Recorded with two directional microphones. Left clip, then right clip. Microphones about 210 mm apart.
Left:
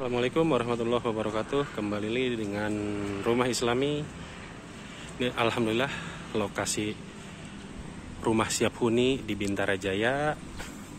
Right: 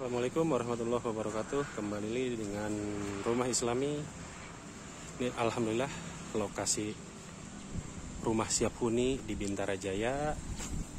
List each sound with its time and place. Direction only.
0.0 s speech: centre (ahead or behind)
5.2 s speech: 10° right (ahead or behind)
8.2 s speech: 5° right (ahead or behind)